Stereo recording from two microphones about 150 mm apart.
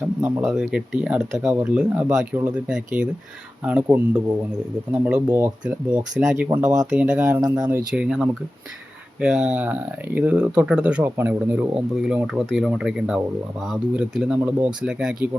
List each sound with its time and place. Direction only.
0.2 s speech: 15° right (ahead or behind)
7.4 s speech: 25° right (ahead or behind)
7.7 s speech: 10° right (ahead or behind)